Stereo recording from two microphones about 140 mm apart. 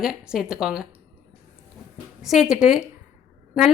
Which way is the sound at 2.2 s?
5° right (ahead or behind).